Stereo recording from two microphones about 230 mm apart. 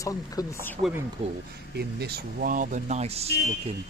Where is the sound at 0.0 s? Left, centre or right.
Centre.